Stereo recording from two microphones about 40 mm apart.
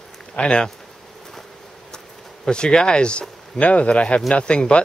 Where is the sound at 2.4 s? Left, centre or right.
Centre.